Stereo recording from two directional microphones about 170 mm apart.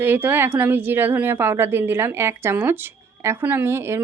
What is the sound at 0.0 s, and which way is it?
A woman's voice, 10° right (ahead or behind).